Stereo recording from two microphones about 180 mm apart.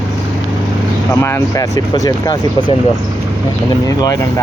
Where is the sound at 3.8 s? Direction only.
20° left (ahead or behind).